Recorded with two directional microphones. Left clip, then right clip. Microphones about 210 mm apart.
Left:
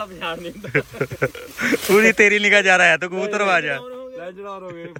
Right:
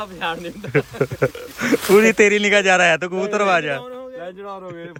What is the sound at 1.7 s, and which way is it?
Speech, 5° right (ahead or behind).